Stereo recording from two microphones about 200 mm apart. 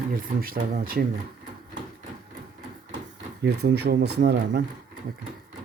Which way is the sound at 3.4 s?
55° right (ahead or behind).